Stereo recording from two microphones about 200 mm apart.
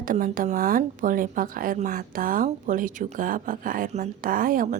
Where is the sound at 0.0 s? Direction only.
40° right (ahead or behind).